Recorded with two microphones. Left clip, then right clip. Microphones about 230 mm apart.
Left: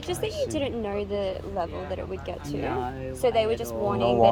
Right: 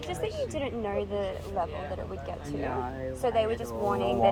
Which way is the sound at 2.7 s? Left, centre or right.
Left.